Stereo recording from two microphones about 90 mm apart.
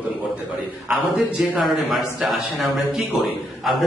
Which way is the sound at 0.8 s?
10° right (ahead or behind).